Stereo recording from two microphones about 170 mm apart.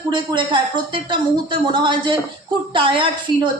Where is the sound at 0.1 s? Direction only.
30° right (ahead or behind).